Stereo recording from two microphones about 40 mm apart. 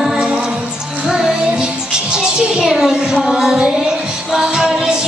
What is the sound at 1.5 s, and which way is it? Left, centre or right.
Speech, centre.